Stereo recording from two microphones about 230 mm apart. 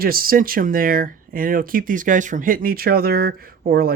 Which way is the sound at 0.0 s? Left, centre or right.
Right.